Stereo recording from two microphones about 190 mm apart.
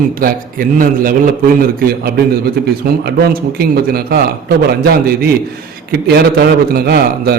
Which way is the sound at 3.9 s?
55° right (ahead or behind).